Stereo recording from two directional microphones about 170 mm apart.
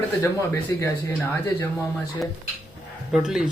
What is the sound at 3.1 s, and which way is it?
Speech, 5° right (ahead or behind).